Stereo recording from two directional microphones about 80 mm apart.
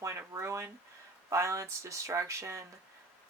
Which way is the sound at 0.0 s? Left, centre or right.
Right.